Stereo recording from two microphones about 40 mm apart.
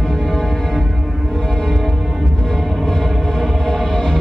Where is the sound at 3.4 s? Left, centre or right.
Centre.